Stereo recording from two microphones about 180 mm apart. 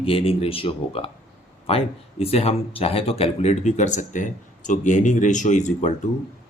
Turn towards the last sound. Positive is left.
turn(degrees=40)  # may be behind; listen again after turning